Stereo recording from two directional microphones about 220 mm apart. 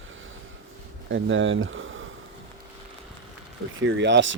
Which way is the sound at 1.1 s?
60° right (ahead or behind).